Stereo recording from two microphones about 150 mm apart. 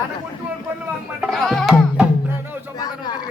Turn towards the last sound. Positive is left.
turn(degrees=25)  # may be behind; listen again after turning